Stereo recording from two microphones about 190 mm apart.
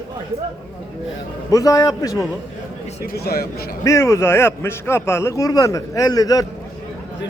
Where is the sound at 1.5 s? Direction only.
20° left (ahead or behind).